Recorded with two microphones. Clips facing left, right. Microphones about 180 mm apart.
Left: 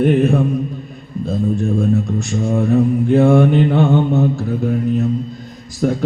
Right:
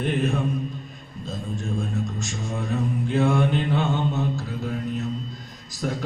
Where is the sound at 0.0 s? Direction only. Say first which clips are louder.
Left 11 dB; 55° left (ahead or behind).